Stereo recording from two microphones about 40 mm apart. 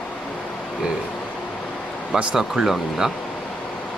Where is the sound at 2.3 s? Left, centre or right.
Centre.